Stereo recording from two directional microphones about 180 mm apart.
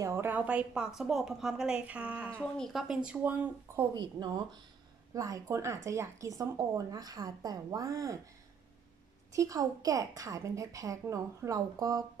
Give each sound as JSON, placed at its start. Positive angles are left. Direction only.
{"t": 0.0, "sound": "a woman's voice", "side_deg": -15}
{"t": 2.4, "sound": "a woman's voice", "side_deg": 5}
{"t": 3.9, "sound": "a woman's voice", "side_deg": -25}
{"t": 9.3, "sound": "a woman's voice", "side_deg": -20}